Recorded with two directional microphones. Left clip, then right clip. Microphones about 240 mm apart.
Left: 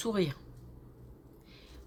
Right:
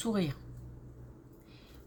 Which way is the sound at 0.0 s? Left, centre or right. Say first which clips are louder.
Left 2 dB; left.